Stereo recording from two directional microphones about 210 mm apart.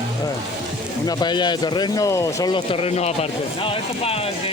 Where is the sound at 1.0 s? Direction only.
20° left (ahead or behind).